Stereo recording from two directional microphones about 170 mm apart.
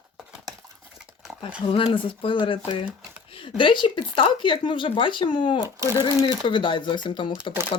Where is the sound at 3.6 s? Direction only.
30° left (ahead or behind).